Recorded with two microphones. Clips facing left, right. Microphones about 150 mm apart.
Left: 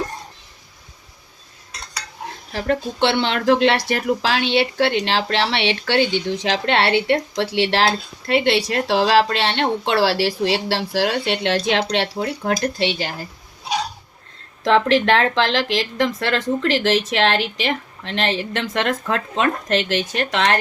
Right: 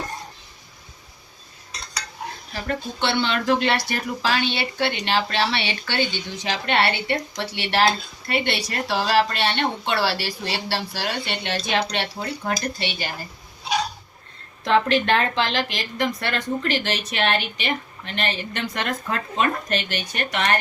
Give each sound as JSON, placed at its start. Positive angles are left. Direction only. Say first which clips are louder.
{"t": 2.6, "sound": "speech", "louder": "left 7 dB", "side_deg": 85}
{"t": 14.6, "sound": "speech", "louder": "left 4 dB", "side_deg": 90}